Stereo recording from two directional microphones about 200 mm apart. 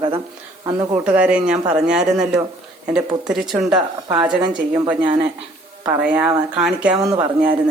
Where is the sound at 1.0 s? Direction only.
5° right (ahead or behind).